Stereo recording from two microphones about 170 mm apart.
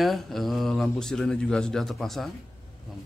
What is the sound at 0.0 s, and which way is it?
Speech, centre (ahead or behind).